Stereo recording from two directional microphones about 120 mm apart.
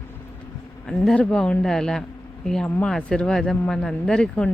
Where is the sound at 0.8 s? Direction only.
5° left (ahead or behind).